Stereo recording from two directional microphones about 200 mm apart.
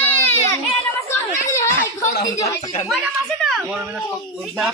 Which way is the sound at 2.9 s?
Centre (ahead or behind).